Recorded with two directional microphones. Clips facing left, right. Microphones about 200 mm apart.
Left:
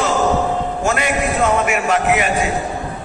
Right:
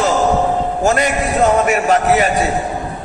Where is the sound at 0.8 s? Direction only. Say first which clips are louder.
Right 4 dB; 40° right (ahead or behind).